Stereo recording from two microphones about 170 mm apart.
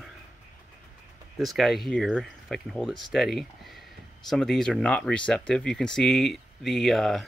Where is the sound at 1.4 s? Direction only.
Centre (ahead or behind).